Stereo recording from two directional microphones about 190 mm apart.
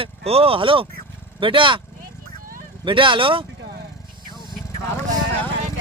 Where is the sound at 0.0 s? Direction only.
30° right (ahead or behind).